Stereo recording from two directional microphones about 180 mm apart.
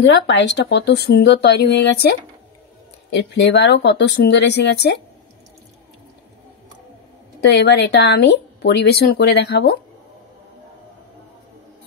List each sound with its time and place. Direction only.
0.0 s speech: 80° left
3.2 s speech: 75° left (ahead or behind)
7.4 s speech: 70° left (ahead or behind)